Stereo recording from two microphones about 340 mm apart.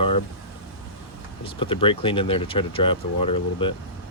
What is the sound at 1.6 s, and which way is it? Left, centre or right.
Speech, centre.